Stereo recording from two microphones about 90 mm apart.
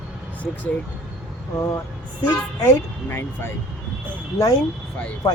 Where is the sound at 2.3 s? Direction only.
25° left (ahead or behind).